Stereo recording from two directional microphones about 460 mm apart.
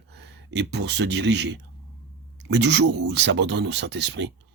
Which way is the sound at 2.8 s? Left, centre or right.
Right.